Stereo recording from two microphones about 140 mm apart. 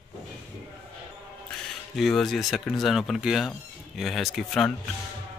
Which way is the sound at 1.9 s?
Centre (ahead or behind).